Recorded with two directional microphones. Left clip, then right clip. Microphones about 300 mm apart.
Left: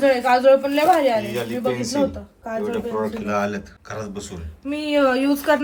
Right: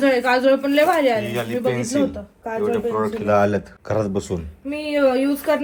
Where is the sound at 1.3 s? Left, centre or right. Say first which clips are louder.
Right 2 dB; centre.